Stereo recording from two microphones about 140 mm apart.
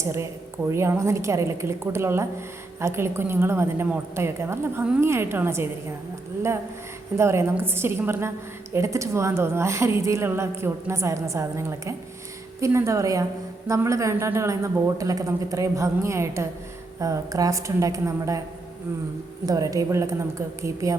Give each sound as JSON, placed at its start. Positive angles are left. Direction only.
{"t": 0.0, "sound": "a woman's voice", "side_deg": -20}
{"t": 7.2, "sound": "a woman's voice", "side_deg": -20}
{"t": 19.5, "sound": "a woman's voice", "side_deg": -25}